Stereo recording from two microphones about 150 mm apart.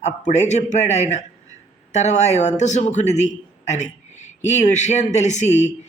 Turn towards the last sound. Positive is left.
turn(degrees=50)  # may be behind; listen again after turning